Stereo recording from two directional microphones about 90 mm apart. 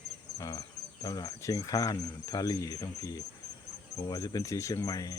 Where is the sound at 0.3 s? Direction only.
40° left (ahead or behind).